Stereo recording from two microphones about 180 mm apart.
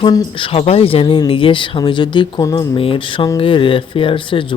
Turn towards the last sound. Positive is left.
turn(degrees=30)  # may be behind; listen again after turning